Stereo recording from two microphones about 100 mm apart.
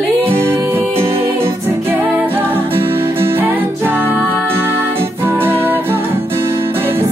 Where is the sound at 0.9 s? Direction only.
70° right (ahead or behind).